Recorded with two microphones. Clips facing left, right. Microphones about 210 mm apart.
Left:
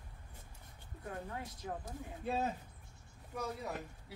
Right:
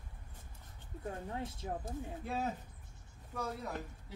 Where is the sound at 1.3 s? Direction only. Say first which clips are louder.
Right 4 dB; 25° right (ahead or behind).